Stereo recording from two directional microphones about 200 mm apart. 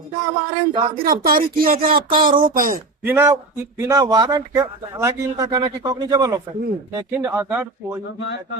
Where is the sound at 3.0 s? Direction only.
10° right (ahead or behind).